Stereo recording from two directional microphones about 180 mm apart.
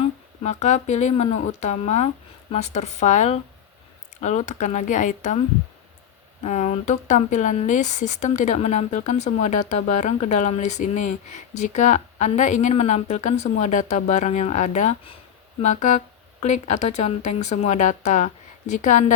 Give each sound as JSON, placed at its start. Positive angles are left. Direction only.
{"t": 0.4, "sound": "speech", "side_deg": 40}
{"t": 6.4, "sound": "speech", "side_deg": 40}